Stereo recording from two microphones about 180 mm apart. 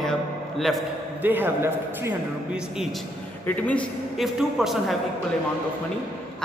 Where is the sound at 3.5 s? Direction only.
5° left (ahead or behind).